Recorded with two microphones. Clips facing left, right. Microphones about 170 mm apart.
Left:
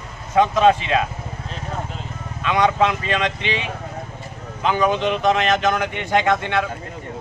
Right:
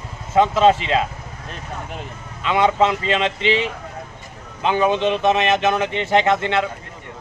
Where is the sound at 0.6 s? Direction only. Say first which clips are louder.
Right 1 dB; 20° right (ahead or behind).